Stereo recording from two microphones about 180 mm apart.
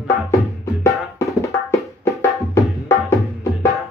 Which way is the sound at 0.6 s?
15° left (ahead or behind).